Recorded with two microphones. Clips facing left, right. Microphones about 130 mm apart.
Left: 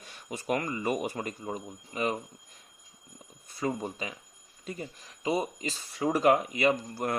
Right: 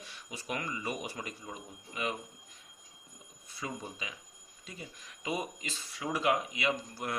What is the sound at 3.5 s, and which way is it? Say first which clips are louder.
Speech: left 9 dB; 45° left (ahead or behind).